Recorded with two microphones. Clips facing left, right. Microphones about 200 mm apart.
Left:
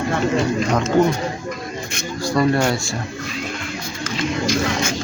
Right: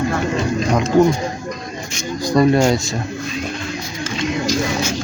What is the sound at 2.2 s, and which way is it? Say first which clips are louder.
Speech: right 4 dB; 20° right (ahead or behind).